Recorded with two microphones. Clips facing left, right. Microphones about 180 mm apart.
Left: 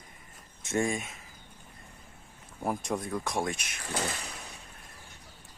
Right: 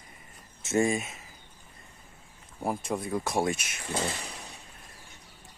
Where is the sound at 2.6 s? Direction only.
5° right (ahead or behind).